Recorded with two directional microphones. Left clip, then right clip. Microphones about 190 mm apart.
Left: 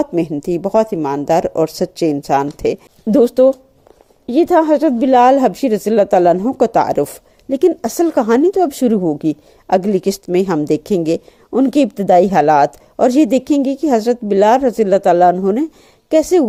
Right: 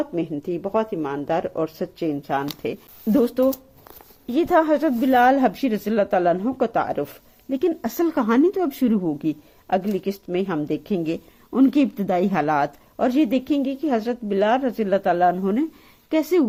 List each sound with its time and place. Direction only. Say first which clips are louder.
0.0 s speech: left 8 dB; 35° left (ahead or behind)
3.1 s a woman's voice: left 9 dB; 20° left (ahead or behind)